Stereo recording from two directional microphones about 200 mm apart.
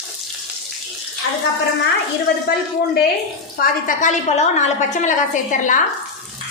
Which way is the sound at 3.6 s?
40° left (ahead or behind).